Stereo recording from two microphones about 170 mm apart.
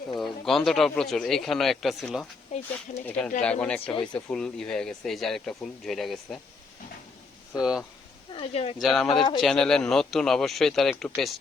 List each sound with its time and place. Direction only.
0.2 s speech: centre (ahead or behind)
2.5 s speech: 40° left (ahead or behind)
3.1 s speech: 5° left (ahead or behind)
7.6 s speech: 5° right (ahead or behind)
8.3 s speech: 35° left (ahead or behind)
8.8 s speech: centre (ahead or behind)